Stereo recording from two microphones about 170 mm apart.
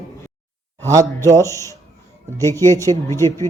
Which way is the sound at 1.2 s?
20° right (ahead or behind).